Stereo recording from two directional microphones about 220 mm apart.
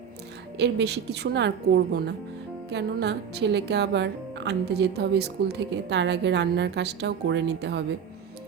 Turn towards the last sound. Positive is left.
turn(degrees=-50)  # may be behind; listen again after turning